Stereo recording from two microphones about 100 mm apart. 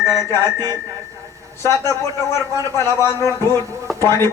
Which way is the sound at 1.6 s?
30° left (ahead or behind).